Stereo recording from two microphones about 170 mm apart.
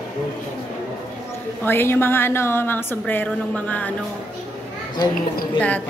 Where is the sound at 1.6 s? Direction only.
15° left (ahead or behind).